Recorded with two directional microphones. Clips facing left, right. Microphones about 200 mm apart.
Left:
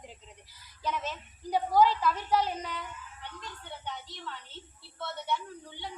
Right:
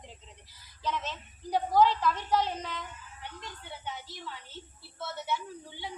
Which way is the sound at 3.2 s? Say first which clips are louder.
Right 3 dB; 5° right (ahead or behind).